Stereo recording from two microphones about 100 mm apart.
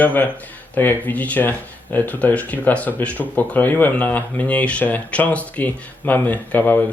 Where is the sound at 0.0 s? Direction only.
15° left (ahead or behind).